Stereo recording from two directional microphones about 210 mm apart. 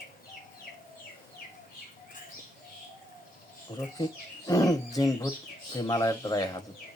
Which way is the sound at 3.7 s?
25° left (ahead or behind).